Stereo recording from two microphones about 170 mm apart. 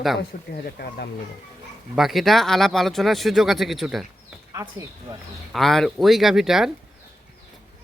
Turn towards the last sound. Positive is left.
turn(degrees=0)  # may be behind; listen again after turning